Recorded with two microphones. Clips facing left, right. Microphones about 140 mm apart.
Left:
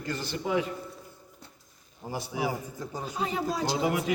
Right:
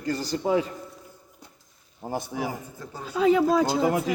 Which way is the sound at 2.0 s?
50° right (ahead or behind).